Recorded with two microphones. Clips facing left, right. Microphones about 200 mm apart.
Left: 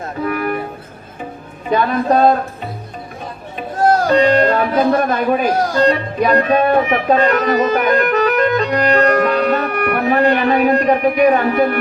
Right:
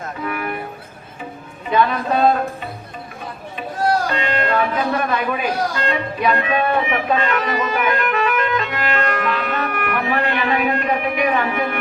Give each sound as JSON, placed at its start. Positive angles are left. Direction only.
{"t": 0.3, "sound": "music", "side_deg": 40}
{"t": 1.7, "sound": "a man's voice", "side_deg": 40}
{"t": 4.1, "sound": "speech", "side_deg": 40}